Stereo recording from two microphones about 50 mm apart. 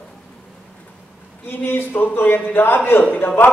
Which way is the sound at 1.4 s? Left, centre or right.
Left.